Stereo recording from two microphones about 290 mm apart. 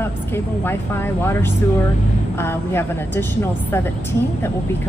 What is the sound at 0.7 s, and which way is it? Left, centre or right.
A woman's voice, centre.